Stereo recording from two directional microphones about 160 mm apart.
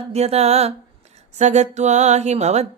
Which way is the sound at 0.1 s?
40° right (ahead or behind).